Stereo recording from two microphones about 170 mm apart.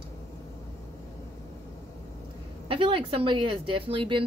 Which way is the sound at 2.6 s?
30° right (ahead or behind).